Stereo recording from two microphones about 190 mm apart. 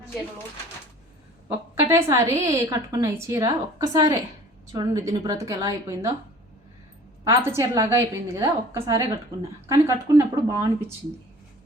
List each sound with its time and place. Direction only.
1.9 s a woman's voice: 15° right (ahead or behind)
7.3 s a woman's voice: 15° right (ahead or behind)